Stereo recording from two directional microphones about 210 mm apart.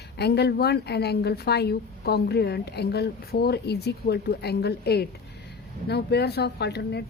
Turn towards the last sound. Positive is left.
turn(degrees=50)  # may be behind; listen again after turning